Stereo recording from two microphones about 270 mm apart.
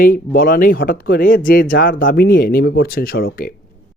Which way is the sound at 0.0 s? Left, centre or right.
Left.